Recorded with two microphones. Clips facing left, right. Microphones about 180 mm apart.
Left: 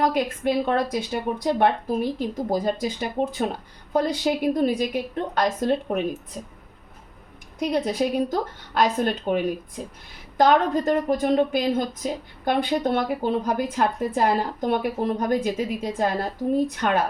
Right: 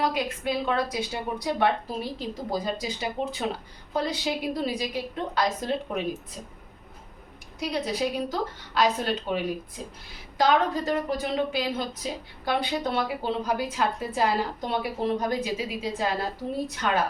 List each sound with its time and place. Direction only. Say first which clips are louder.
0.0 s a woman's voice: left 5 dB; 50° left (ahead or behind)
7.6 s a woman's voice: left 5 dB; 50° left (ahead or behind)